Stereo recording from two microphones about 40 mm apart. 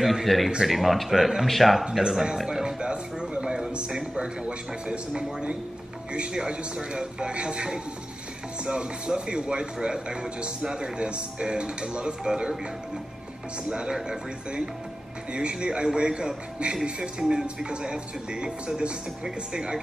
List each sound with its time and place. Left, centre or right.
0.0 s a man's voice: centre
2.3 s music: centre
2.8 s music: right
3.9 s speech: centre
13.7 s speech: right
15.3 s speech: right